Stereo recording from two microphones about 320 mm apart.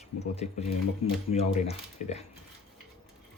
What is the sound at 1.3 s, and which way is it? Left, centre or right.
Speech, centre.